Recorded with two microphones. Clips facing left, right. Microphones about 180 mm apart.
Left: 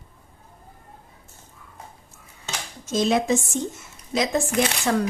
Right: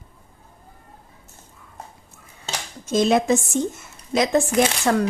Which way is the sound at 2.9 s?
55° right (ahead or behind).